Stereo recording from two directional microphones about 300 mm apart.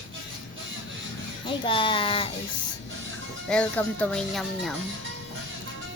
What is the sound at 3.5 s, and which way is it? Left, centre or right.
Speech, centre.